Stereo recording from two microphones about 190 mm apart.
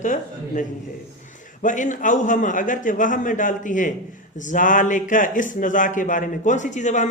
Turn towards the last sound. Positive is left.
turn(degrees=40)  # may be behind; listen again after turning